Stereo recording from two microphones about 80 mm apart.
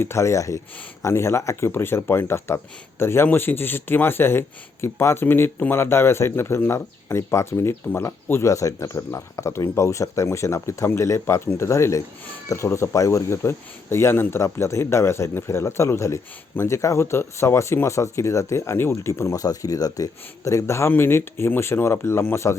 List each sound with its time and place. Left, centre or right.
0.0 s speech: left